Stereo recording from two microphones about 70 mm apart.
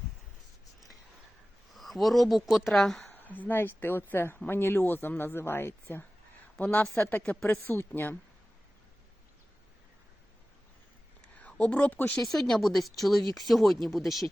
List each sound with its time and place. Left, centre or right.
1.7 s speech: centre
3.1 s speech: left
11.3 s speech: centre
12.2 s speech: centre